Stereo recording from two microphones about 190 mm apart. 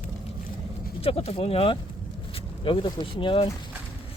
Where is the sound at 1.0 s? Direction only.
30° left (ahead or behind).